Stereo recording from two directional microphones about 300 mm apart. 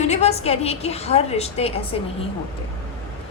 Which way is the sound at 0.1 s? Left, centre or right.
Left.